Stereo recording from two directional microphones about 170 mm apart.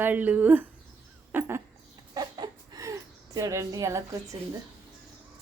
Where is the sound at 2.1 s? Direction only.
25° right (ahead or behind).